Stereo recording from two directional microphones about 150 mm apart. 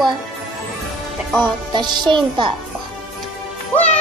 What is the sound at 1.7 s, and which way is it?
Speech, 30° right (ahead or behind).